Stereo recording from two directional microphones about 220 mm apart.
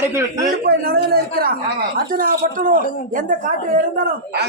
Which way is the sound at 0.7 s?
45° right (ahead or behind).